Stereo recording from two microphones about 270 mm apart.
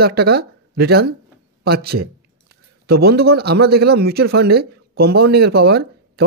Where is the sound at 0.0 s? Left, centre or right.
Right.